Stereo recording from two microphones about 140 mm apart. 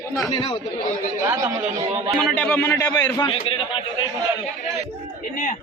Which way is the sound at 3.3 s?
40° left (ahead or behind).